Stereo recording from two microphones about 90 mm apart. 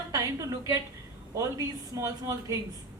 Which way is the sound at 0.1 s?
35° right (ahead or behind).